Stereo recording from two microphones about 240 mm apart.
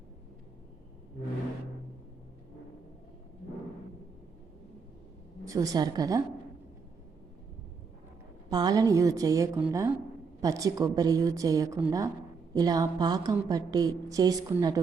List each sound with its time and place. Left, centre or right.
5.5 s a woman's voice: centre
8.4 s a woman's voice: centre